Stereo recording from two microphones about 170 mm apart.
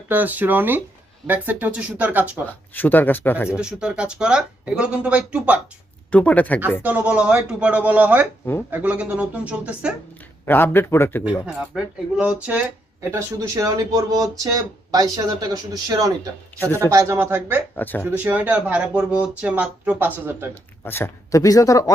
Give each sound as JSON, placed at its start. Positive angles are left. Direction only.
{"t": 0.1, "sound": "speech", "side_deg": -10}
{"t": 2.5, "sound": "speech", "side_deg": 10}
{"t": 3.5, "sound": "speech", "side_deg": -5}
{"t": 6.1, "sound": "speech", "side_deg": 10}
{"t": 6.8, "sound": "speech", "side_deg": -10}
{"t": 10.4, "sound": "speech", "side_deg": 10}
{"t": 11.2, "sound": "speech", "side_deg": -5}
{"t": 17.7, "sound": "speech", "side_deg": 10}
{"t": 18.0, "sound": "speech", "side_deg": -10}
{"t": 20.8, "sound": "speech", "side_deg": 15}